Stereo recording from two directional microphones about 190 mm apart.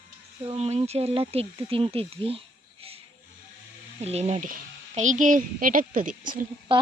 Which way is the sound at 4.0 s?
35° right (ahead or behind).